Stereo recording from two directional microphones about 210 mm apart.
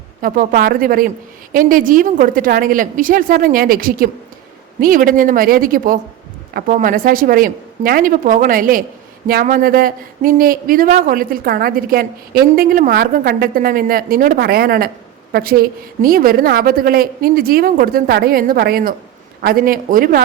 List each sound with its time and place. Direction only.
0.2 s a woman's voice: 45° right (ahead or behind)